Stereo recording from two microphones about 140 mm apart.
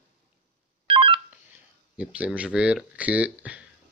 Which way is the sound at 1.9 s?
10° right (ahead or behind).